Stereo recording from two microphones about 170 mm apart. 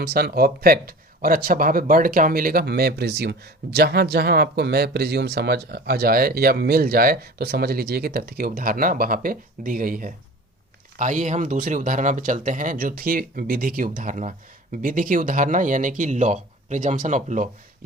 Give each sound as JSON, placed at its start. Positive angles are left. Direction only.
{"t": 0.0, "sound": "speech", "side_deg": -65}
{"t": 10.9, "sound": "speech", "side_deg": -45}